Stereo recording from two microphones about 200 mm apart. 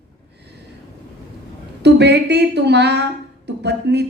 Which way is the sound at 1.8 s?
55° right (ahead or behind).